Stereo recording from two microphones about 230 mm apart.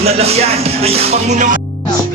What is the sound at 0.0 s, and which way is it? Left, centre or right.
Music, right.